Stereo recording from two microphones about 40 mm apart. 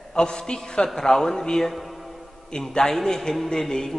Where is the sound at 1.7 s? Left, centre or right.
Centre.